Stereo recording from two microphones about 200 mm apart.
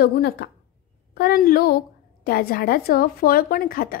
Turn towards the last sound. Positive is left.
turn(degrees=45)  # may be behind; listen again after turning